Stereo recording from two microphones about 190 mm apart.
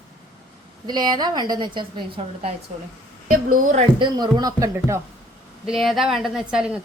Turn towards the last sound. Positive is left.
turn(degrees=-5)  # may be behind; listen again after turning